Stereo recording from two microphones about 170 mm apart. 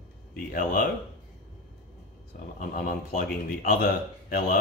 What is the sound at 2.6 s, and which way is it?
Speech, 55° left (ahead or behind).